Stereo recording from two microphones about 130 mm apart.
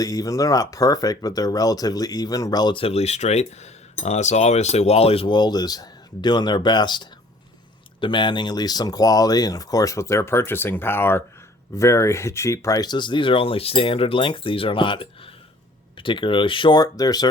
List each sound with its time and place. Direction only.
0.0 s speech: 30° left (ahead or behind)
2.8 s speech: 55° left (ahead or behind); by 17.2 s 30° left (ahead or behind)